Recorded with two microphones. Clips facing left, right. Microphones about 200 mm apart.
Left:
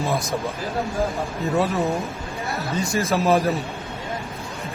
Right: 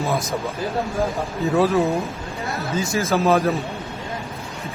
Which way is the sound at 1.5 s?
Centre (ahead or behind).